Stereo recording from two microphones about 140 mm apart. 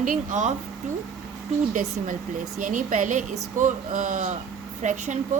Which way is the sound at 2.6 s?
70° right (ahead or behind).